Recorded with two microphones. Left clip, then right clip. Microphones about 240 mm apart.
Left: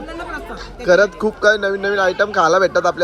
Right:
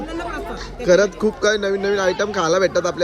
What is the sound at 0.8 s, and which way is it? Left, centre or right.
Speech, centre.